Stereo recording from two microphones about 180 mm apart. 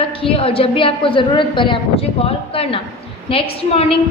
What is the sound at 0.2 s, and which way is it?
A woman's voice, 30° left (ahead or behind).